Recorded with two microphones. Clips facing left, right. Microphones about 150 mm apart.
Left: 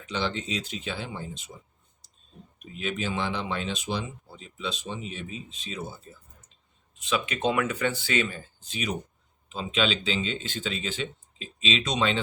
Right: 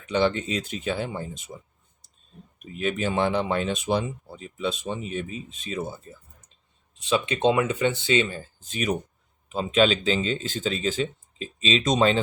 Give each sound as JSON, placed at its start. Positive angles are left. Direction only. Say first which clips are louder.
{"t": 0.1, "sound": "speech", "louder": "right 7 dB", "side_deg": -50}
{"t": 2.7, "sound": "speech", "louder": "right 5 dB", "side_deg": -50}
{"t": 7.0, "sound": "speech", "louder": "right 5 dB", "side_deg": -30}
{"t": 8.7, "sound": "speech", "louder": "right 5 dB", "side_deg": -50}